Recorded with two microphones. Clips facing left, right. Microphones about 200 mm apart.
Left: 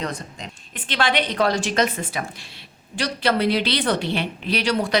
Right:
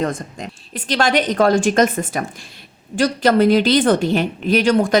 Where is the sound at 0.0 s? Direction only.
50° right (ahead or behind).